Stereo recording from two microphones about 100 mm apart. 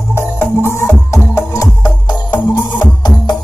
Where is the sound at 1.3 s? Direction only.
35° left (ahead or behind).